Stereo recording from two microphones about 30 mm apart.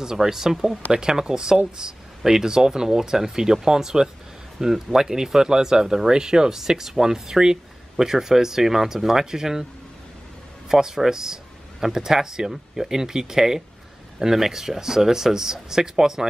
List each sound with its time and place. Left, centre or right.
0.0 s speech: centre
6.6 s speech: centre
10.7 s speech: centre